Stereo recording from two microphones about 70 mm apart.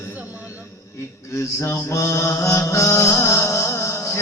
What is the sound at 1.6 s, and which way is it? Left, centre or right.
Mantra, left.